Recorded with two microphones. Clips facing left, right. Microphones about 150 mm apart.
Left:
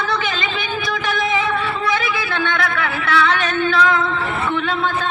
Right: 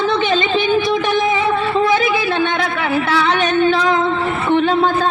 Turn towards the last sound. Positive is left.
turn(degrees=-25)  # may be behind; listen again after turning